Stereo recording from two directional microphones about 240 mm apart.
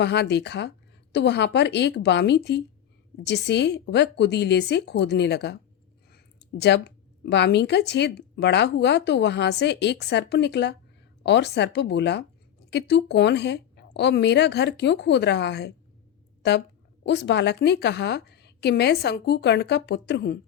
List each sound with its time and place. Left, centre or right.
0.0 s a woman's voice: left